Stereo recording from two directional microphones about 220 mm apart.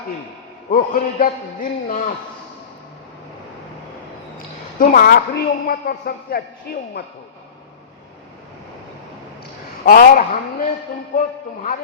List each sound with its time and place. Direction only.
0.7 s a man's voice: 40° left (ahead or behind)
4.8 s a woman's voice: 40° left (ahead or behind)
9.8 s a man's voice: 40° left (ahead or behind)